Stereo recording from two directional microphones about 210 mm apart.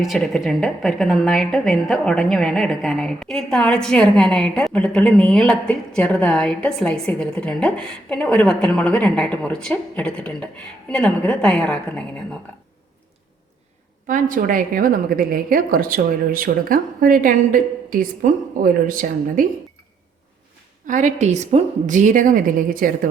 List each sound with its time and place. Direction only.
0.0 s a woman's voice: centre (ahead or behind)
14.1 s a woman's voice: 40° right (ahead or behind)
20.8 s a woman's voice: 35° right (ahead or behind)